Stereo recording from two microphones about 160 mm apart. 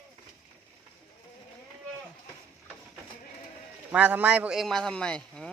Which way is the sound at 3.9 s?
10° right (ahead or behind).